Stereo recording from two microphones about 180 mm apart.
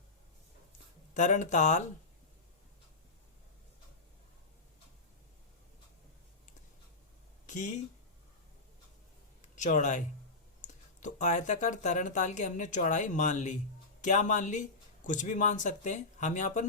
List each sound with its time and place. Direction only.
1.1 s speech: 45° left (ahead or behind)
7.4 s a sound: 45° left (ahead or behind)
9.6 s speech: 45° left (ahead or behind)